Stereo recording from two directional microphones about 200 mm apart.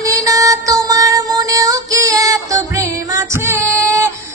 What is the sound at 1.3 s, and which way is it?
Music, 15° right (ahead or behind).